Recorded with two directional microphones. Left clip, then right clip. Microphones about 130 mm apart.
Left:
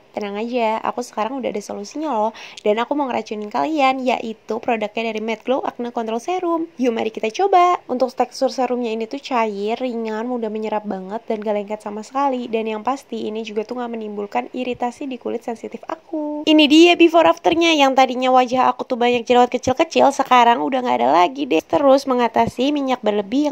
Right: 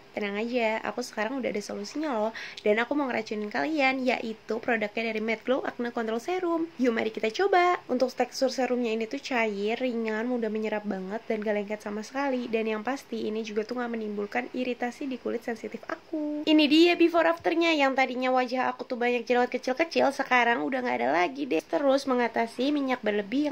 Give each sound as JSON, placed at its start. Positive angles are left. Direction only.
{"t": 0.2, "sound": "a woman's voice", "side_deg": 45}
{"t": 16.4, "sound": "a woman's voice", "side_deg": 60}